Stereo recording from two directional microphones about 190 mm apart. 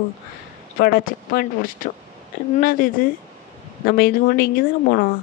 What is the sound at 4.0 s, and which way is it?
Speech, 50° left (ahead or behind).